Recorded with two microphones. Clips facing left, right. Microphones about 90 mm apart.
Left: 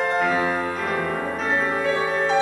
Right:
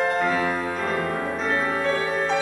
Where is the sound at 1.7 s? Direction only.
15° left (ahead or behind).